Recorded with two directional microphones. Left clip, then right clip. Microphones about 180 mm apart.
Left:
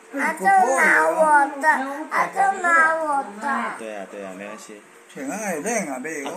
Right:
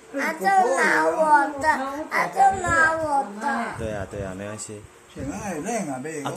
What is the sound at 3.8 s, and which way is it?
Speech, 25° right (ahead or behind).